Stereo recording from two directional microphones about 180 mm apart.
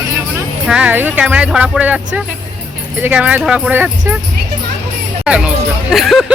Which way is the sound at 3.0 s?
10° right (ahead or behind).